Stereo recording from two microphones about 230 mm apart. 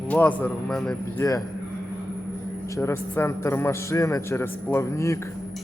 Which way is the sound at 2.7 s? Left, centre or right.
Centre.